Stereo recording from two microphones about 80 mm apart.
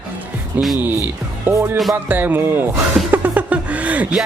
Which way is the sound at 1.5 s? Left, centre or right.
Right.